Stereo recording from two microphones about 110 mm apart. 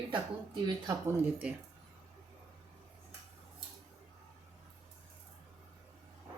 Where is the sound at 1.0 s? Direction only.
15° right (ahead or behind).